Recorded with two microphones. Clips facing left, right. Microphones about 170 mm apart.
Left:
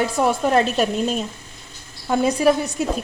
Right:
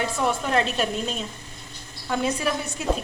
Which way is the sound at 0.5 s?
45° left (ahead or behind).